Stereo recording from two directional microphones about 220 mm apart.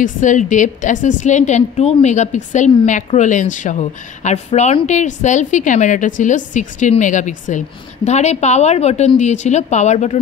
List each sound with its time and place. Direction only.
0.0 s a woman's voice: 35° left (ahead or behind)